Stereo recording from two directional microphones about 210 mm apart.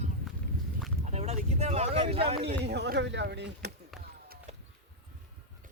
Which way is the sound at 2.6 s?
55° right (ahead or behind).